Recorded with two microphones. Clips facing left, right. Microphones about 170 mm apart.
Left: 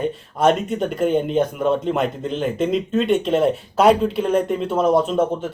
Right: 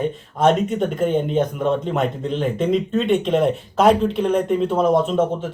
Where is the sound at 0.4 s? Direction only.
5° left (ahead or behind).